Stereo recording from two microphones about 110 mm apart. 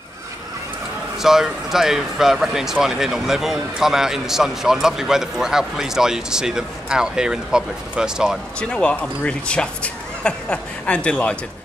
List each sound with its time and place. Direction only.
1.2 s speech: 5° right (ahead or behind)
8.5 s speech: 10° left (ahead or behind)